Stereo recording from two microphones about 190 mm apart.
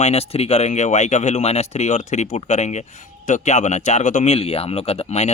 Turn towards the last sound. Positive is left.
turn(degrees=35)  # may be behind; listen again after turning